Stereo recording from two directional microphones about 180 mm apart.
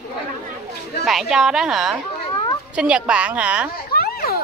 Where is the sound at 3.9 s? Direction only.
55° left (ahead or behind).